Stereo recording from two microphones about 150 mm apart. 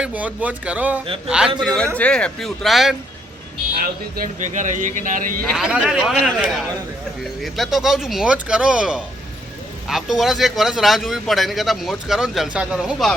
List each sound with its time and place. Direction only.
0.0 s speech: 10° right (ahead or behind)
1.6 s a man's voice: 5° left (ahead or behind)
3.8 s speech: 70° right (ahead or behind)
5.5 s a man's voice: 5° right (ahead or behind)